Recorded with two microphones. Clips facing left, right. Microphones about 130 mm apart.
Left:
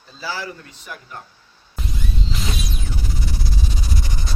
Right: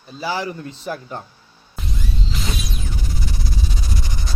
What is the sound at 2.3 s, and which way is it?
Music, centre (ahead or behind).